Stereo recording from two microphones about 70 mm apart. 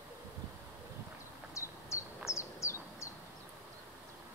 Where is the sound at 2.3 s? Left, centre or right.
Left.